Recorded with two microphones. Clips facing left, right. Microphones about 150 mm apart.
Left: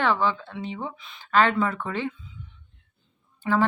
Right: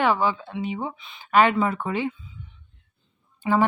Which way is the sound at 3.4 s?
10° right (ahead or behind).